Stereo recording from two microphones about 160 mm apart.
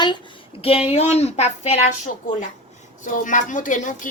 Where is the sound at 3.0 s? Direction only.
55° left (ahead or behind).